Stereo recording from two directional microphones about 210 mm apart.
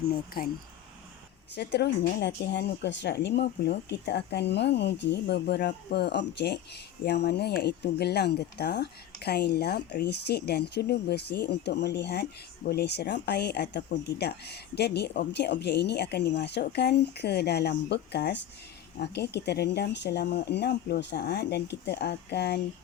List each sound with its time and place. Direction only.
0.0 s speech: 45° left (ahead or behind)
1.5 s speech: 55° left (ahead or behind)